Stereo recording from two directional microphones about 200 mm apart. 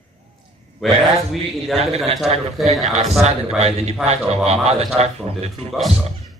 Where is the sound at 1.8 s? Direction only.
30° right (ahead or behind).